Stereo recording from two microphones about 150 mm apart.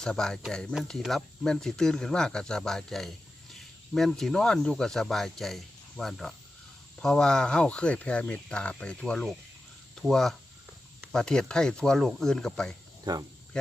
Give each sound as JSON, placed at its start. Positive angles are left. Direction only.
{"t": 0.0, "sound": "speech", "side_deg": 5}
{"t": 13.1, "sound": "speech", "side_deg": -30}